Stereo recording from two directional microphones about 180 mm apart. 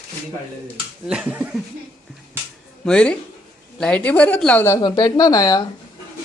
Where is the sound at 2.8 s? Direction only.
5° left (ahead or behind).